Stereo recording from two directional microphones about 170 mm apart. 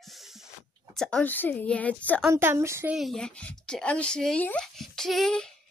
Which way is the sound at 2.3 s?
15° right (ahead or behind).